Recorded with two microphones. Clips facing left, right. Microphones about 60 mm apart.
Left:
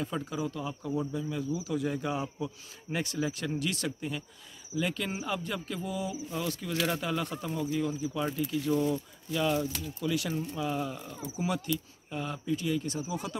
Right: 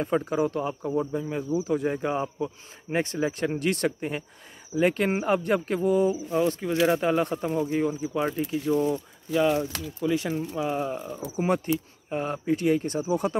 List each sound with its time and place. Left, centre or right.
0.0 s speech: right
7.9 s speech: right
8.7 s speech: centre
9.3 s speech: right
11.3 s speech: right